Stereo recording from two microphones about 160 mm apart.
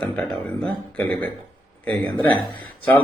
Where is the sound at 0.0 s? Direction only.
5° left (ahead or behind).